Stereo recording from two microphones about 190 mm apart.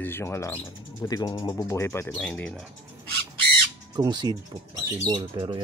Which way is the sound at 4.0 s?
20° right (ahead or behind).